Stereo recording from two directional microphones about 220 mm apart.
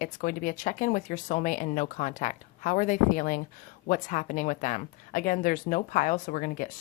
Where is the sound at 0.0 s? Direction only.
40° left (ahead or behind).